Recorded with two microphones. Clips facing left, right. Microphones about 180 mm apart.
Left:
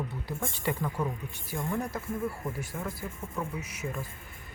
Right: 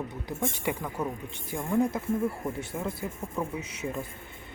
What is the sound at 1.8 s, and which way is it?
Speech, 20° right (ahead or behind).